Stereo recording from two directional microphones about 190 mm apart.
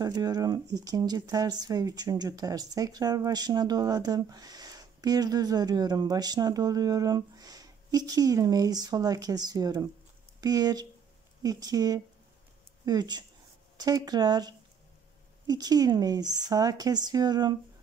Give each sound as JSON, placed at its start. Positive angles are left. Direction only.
{"t": 0.0, "sound": "speech", "side_deg": -20}